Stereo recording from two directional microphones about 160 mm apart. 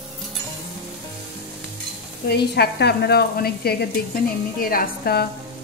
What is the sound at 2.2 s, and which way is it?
Sizzle, 90° left.